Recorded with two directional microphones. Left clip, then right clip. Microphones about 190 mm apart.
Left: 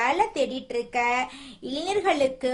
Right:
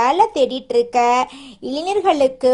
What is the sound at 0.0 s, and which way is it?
Speech, 25° right (ahead or behind).